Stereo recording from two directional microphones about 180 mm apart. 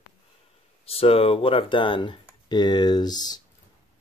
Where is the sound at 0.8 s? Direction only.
35° left (ahead or behind).